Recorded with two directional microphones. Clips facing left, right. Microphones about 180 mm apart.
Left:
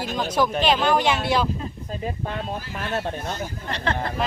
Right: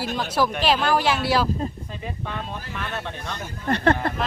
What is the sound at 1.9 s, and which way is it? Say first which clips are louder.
Speech: left 3 dB; 40° left (ahead or behind).